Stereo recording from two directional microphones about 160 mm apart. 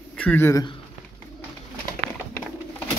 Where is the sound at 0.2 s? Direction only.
10° left (ahead or behind).